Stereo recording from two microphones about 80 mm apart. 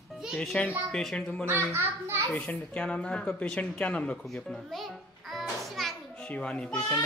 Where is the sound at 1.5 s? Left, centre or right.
Right.